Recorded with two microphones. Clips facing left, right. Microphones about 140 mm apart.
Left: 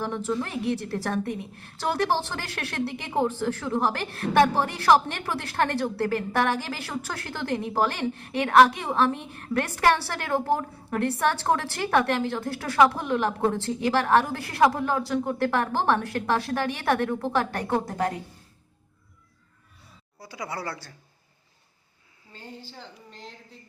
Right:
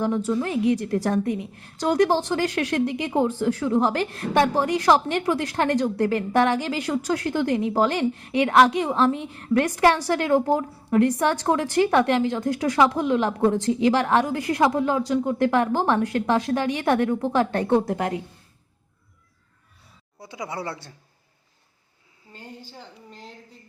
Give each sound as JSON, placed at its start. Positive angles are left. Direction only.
{"t": 0.0, "sound": "a woman's voice", "side_deg": -15}
{"t": 20.1, "sound": "speech", "side_deg": -20}
{"t": 22.3, "sound": "a woman's voice", "side_deg": -10}